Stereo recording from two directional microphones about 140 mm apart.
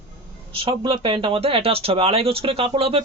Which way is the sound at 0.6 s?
40° right (ahead or behind).